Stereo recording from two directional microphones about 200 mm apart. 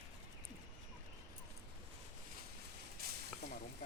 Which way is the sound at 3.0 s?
50° right (ahead or behind).